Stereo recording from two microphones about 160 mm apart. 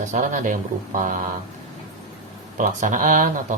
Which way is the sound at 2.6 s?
55° right (ahead or behind).